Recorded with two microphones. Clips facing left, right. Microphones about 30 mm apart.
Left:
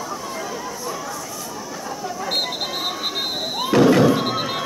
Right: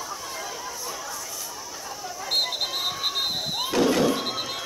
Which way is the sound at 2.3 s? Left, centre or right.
Centre.